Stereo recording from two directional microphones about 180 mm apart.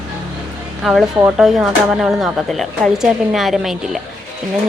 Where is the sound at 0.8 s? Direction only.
Centre (ahead or behind).